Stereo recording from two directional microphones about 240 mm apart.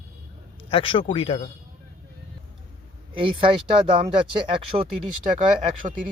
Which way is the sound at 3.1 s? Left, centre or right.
Right.